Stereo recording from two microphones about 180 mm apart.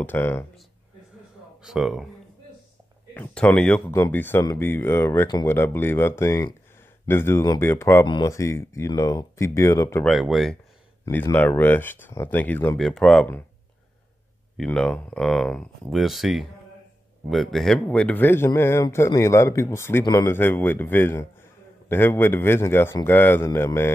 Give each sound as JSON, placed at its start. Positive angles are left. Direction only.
{"t": 0.0, "sound": "a man's voice", "side_deg": 10}
{"t": 1.6, "sound": "speech", "side_deg": 0}
{"t": 3.2, "sound": "a man's voice", "side_deg": 5}
{"t": 10.0, "sound": "a man's voice", "side_deg": 0}
{"t": 14.6, "sound": "a man's voice", "side_deg": 5}